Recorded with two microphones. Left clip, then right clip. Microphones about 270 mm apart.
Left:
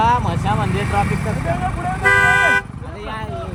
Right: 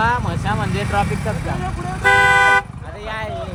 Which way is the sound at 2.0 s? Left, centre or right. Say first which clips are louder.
Right 1 dB; right.